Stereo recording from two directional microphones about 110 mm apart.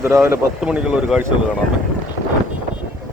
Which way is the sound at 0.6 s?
5° right (ahead or behind).